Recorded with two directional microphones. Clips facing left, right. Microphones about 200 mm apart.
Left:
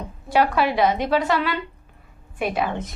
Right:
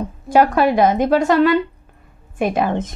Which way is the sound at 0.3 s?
45° right (ahead or behind).